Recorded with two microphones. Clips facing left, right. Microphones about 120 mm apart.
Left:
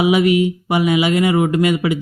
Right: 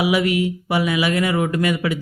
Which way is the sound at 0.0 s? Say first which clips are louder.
Left 5 dB; 20° left (ahead or behind).